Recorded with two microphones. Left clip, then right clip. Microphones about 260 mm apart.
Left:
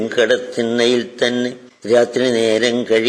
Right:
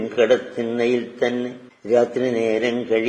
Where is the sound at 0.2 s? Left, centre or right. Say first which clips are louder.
Left 2 dB; left.